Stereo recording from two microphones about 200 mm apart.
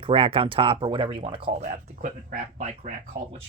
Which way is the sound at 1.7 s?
40° right (ahead or behind).